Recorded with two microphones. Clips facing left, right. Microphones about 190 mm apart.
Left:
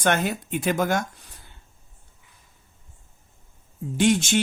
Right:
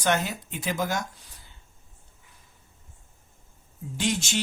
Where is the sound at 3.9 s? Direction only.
55° left (ahead or behind).